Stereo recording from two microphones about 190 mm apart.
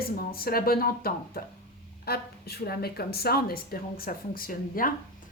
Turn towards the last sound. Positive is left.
turn(degrees=50)  # may be behind; listen again after turning